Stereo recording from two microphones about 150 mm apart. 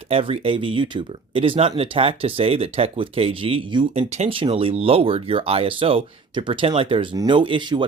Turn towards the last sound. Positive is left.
turn(degrees=-30)  # may be behind; listen again after turning